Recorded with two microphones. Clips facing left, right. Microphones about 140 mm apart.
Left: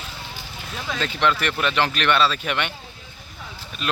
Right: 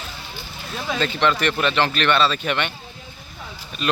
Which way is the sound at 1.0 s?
5° left (ahead or behind).